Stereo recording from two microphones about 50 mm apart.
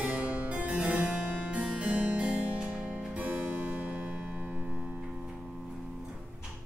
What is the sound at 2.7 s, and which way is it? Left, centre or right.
Music, right.